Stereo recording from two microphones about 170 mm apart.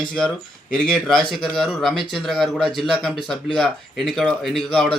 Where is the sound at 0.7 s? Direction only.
5° left (ahead or behind).